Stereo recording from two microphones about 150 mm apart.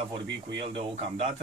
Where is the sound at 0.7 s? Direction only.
45° right (ahead or behind).